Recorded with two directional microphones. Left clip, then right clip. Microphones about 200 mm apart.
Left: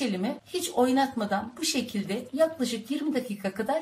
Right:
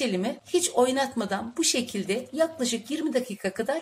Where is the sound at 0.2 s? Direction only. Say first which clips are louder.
Right 5 dB; 40° right (ahead or behind).